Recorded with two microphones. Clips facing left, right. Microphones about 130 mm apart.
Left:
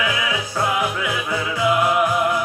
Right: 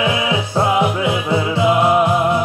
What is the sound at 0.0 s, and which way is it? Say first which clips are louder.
Music: right 5 dB; 25° right (ahead or behind).